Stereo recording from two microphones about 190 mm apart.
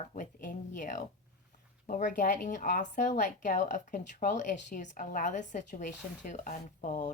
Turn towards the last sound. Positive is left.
turn(degrees=40)  # may be behind; listen again after turning